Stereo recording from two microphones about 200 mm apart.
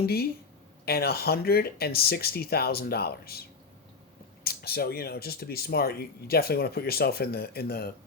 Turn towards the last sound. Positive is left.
turn(degrees=50)  # may be behind; listen again after turning